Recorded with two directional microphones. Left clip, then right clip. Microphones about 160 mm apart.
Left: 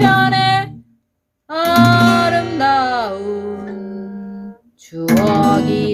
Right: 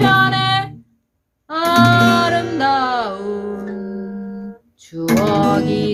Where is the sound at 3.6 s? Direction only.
30° left (ahead or behind).